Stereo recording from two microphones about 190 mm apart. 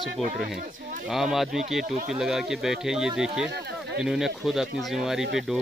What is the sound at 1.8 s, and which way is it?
Speech, 45° right (ahead or behind).